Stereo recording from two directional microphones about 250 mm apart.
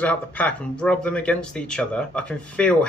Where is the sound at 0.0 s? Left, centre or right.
Centre.